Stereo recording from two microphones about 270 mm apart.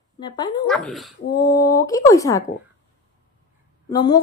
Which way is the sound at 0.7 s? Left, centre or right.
Centre.